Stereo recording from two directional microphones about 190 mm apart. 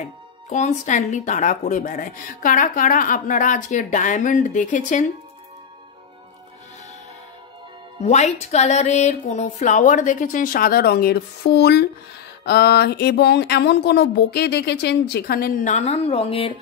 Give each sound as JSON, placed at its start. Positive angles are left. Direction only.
{"t": 0.5, "sound": "speech", "side_deg": 40}
{"t": 8.0, "sound": "speech", "side_deg": 35}